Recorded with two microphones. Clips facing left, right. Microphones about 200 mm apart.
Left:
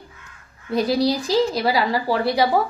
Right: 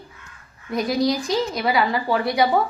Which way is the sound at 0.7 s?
30° left (ahead or behind).